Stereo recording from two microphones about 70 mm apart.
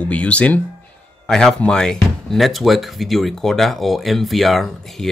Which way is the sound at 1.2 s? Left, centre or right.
Centre.